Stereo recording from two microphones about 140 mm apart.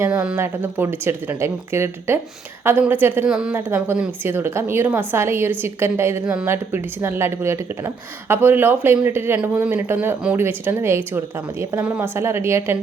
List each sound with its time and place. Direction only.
0.1 s a woman's voice: 5° right (ahead or behind)
3.5 s a woman's voice: 15° right (ahead or behind)
6.2 s a woman's voice: 5° right (ahead or behind)